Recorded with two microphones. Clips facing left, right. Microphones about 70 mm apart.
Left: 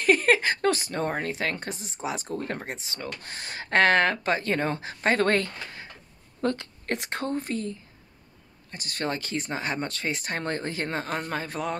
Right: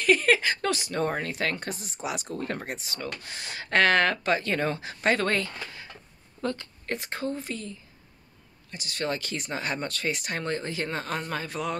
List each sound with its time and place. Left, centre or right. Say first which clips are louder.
0.0 s speech: left 1 dB; left
3.2 s speech: left 1 dB; left
6.4 s a woman's voice: left 4 dB; left
7.4 s speech: left 5 dB; left